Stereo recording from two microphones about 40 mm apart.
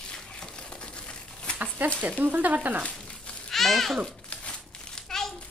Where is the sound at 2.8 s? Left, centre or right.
Left.